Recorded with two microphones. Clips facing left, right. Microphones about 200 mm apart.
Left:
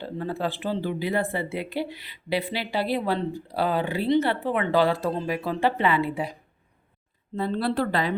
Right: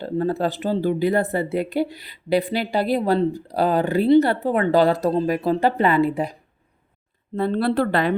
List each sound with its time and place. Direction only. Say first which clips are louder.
0.0 s speech: right 7 dB; 40° right (ahead or behind)
7.3 s speech: right 5 dB; 60° right (ahead or behind)